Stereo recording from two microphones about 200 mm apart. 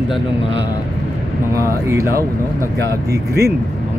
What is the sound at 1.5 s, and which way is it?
Speech, 15° right (ahead or behind).